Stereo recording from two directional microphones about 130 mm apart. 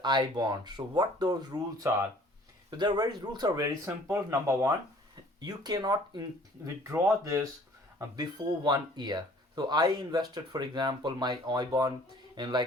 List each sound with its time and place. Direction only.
0.0 s speech: 35° right (ahead or behind)
5.4 s speech: 30° right (ahead or behind)